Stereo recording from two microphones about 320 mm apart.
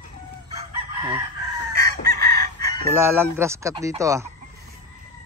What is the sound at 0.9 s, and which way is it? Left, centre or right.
Chicken, centre.